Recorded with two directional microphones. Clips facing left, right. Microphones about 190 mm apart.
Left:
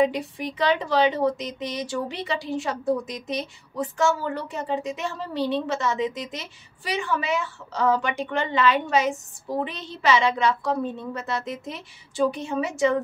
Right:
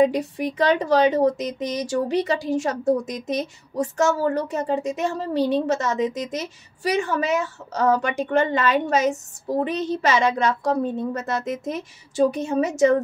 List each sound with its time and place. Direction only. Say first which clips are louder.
0.0 s a woman's voice: right 4 dB; 45° right (ahead or behind)